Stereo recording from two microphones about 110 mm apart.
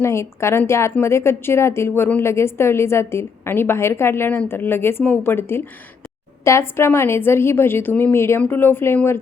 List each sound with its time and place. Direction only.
0.0 s a woman's voice: 25° left (ahead or behind)